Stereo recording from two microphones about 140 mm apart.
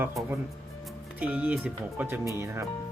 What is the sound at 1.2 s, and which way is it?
Speech, 10° right (ahead or behind).